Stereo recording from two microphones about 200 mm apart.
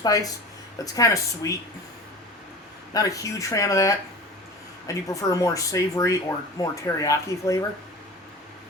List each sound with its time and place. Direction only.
0.0 s speech: 15° left (ahead or behind)
2.9 s speech: 15° left (ahead or behind)
5.0 s speech: 15° left (ahead or behind)